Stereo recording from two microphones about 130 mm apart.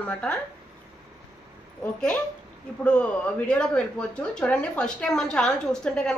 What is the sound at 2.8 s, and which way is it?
Speech, 10° left (ahead or behind).